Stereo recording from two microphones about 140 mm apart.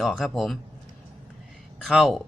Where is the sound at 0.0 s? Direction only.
Centre (ahead or behind).